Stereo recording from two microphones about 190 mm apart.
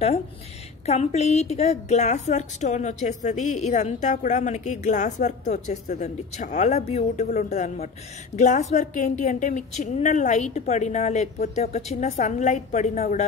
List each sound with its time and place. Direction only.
0.8 s a woman's voice: 35° left (ahead or behind)